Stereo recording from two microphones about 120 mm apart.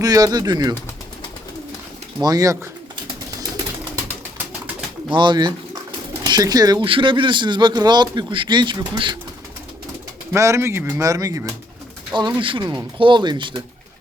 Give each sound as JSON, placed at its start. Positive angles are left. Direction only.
{"t": 0.0, "sound": "a man's voice", "side_deg": -30}
{"t": 2.2, "sound": "a man's voice", "side_deg": -30}
{"t": 5.1, "sound": "a man's voice", "side_deg": -40}
{"t": 6.8, "sound": "a man's voice", "side_deg": -45}
{"t": 10.3, "sound": "speech", "side_deg": -25}
{"t": 12.1, "sound": "speech", "side_deg": -45}